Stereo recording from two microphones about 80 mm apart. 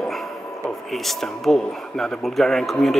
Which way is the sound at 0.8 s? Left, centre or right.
Centre.